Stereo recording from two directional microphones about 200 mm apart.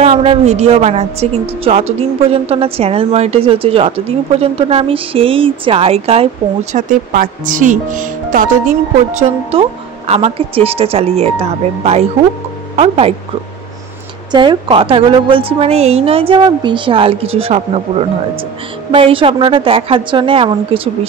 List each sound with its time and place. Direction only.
0.0 s a woman's voice: 30° right (ahead or behind)
6.7 s a woman's voice: 40° right (ahead or behind)
9.5 s a woman's voice: 30° right (ahead or behind)
14.3 s a woman's voice: 25° right (ahead or behind)